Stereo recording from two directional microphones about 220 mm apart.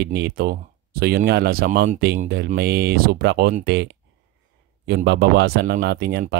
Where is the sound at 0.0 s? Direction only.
50° right (ahead or behind).